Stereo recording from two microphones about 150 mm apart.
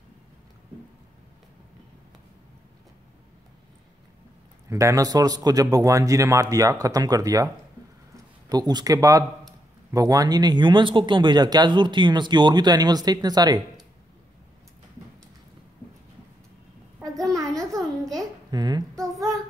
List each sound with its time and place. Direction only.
4.6 s speech: 20° right (ahead or behind)
8.5 s speech: 25° right (ahead or behind)
17.2 s a sound: 25° right (ahead or behind)
18.1 s babbling: 25° right (ahead or behind)
19.1 s child singing: 25° right (ahead or behind)